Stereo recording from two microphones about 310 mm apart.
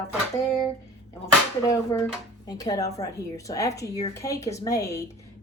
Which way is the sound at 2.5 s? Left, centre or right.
Centre.